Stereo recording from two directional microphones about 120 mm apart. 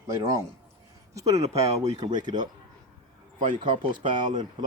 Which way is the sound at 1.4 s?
65° right (ahead or behind).